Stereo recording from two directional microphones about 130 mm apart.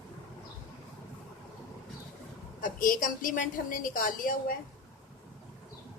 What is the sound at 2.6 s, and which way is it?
A woman's voice, 90° left.